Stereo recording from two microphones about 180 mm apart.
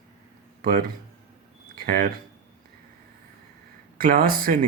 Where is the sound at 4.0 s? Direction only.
55° right (ahead or behind).